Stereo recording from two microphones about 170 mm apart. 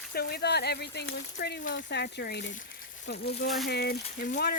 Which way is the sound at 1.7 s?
90° left.